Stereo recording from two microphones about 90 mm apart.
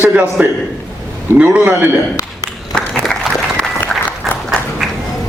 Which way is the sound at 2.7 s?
5° left (ahead or behind).